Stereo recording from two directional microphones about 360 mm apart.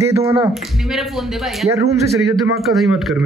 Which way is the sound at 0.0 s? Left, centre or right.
Centre.